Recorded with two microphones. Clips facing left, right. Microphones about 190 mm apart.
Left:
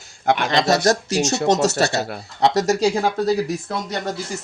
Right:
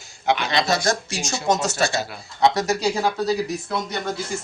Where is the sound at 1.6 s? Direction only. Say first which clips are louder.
Left 4 dB; 40° left (ahead or behind).